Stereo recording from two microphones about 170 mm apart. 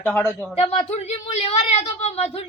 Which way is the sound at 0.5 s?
35° left (ahead or behind).